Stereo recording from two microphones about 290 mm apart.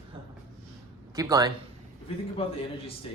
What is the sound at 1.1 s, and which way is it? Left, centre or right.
Speech, centre.